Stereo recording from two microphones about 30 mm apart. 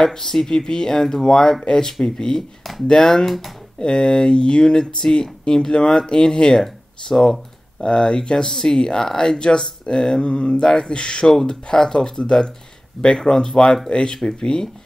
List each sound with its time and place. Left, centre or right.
0.0 s speech: centre
2.9 s speech: centre
3.8 s speech: left
6.5 s speech: centre
7.8 s speech: left
10.2 s mantra: left
10.7 s speech: centre
11.0 s speech: left